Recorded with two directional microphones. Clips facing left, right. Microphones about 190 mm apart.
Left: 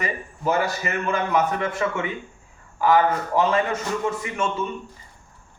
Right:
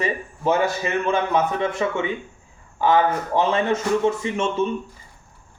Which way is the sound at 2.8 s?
25° right (ahead or behind).